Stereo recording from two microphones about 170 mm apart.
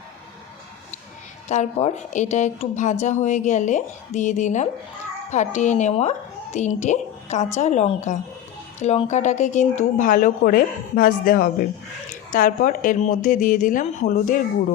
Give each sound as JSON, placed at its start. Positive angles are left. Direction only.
{"t": 1.5, "sound": "a woman's voice", "side_deg": 40}